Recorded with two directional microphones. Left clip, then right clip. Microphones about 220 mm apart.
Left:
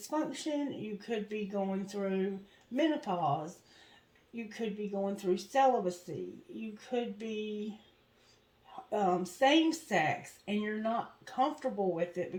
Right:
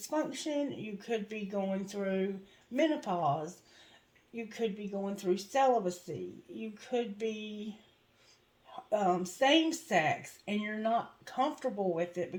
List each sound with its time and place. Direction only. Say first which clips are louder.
0.1 s speech: right 1 dB; 35° right (ahead or behind)
8.7 s speech: right 1 dB; 35° right (ahead or behind)